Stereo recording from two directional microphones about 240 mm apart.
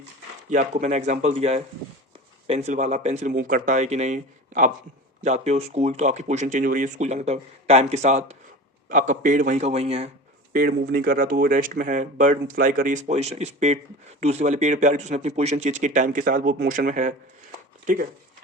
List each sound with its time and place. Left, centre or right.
0.5 s speech: right
10.5 s speech: right